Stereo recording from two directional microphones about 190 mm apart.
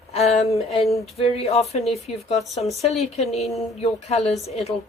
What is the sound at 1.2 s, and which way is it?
Speech, 30° left (ahead or behind).